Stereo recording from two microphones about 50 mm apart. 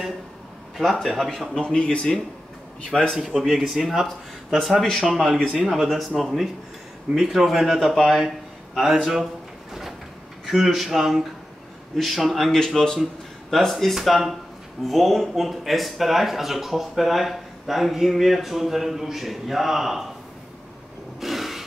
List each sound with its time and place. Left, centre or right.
1.0 s speech: centre
1.5 s a man's voice: centre
3.2 s a man's voice: centre
10.4 s a man's voice: centre
21.2 s a sound: centre